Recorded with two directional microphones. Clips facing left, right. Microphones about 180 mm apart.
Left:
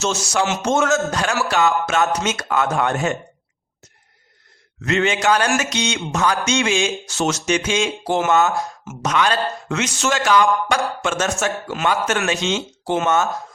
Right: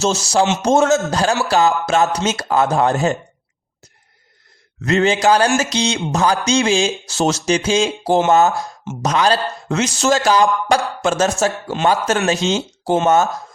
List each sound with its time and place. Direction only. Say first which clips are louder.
0.0 s speech: right 4 dB; 35° right (ahead or behind)
4.8 s speech: right 4 dB; 35° right (ahead or behind)